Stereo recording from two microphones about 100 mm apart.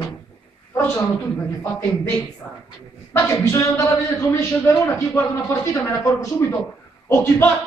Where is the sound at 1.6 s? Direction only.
25° left (ahead or behind).